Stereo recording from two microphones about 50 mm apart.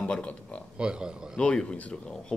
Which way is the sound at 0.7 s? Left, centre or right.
Centre.